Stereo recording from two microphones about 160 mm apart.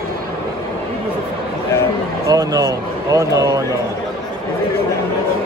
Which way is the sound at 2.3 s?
25° right (ahead or behind).